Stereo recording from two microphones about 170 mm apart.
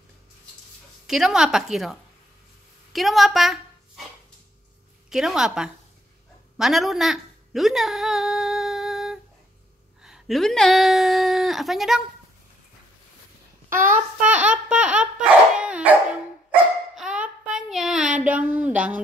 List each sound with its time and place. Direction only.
1.0 s a woman's voice: 5° right (ahead or behind)
5.1 s a woman's voice: 5° right (ahead or behind)
6.6 s a sound: centre (ahead or behind)
10.0 s speech: centre (ahead or behind)
13.7 s dog: 10° right (ahead or behind)
16.9 s a sound: 5° right (ahead or behind)